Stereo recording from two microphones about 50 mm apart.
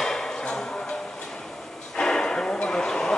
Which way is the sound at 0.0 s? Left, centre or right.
Centre.